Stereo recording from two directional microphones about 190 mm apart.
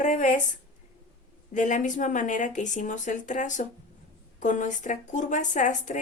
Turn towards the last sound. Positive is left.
turn(degrees=40)  # may be behind; listen again after turning